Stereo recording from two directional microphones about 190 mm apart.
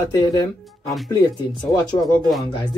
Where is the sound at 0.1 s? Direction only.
20° left (ahead or behind).